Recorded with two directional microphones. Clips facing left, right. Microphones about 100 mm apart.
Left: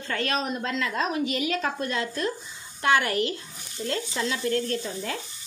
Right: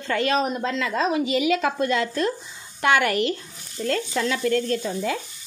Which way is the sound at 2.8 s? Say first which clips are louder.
Right 3 dB; 70° right (ahead or behind).